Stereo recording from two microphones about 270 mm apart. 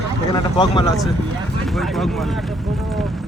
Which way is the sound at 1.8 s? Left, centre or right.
Centre.